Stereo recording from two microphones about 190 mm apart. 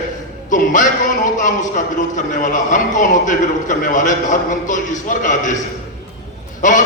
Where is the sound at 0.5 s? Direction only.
45° left (ahead or behind).